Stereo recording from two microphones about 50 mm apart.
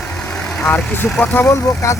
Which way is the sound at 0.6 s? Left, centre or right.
Left.